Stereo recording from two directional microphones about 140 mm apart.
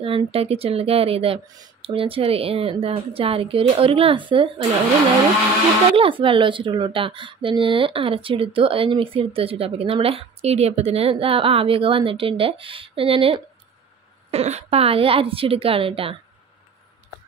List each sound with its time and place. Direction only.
0.0 s a woman's voice: 45° right (ahead or behind)
5.9 s a woman's voice: 40° right (ahead or behind)